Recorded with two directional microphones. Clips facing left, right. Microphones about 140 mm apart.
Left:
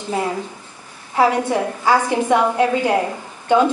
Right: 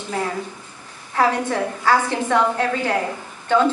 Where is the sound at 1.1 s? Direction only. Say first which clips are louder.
Left 3 dB; 15° left (ahead or behind).